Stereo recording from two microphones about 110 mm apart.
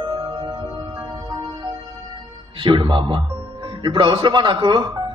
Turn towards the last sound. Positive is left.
turn(degrees=-45)  # may be behind; listen again after turning